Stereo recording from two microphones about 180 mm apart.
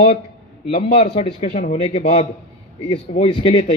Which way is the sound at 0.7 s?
30° left (ahead or behind).